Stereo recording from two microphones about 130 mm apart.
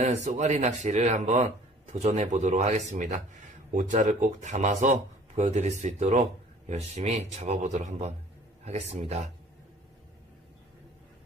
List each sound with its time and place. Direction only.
0.0 s speech: 55° right (ahead or behind)
3.7 s speech: 75° right (ahead or behind)
8.6 s speech: 55° right (ahead or behind)